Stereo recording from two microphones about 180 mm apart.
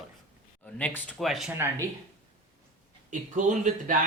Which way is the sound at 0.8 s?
10° left (ahead or behind).